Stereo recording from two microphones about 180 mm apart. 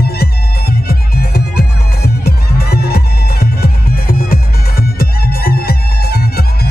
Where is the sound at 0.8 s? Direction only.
60° left (ahead or behind).